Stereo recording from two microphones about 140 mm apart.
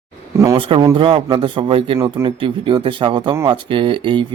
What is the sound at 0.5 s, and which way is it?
Speech, 40° right (ahead or behind).